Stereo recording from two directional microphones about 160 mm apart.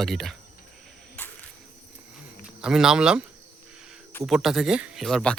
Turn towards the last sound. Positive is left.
turn(degrees=5)  # may be behind; listen again after turning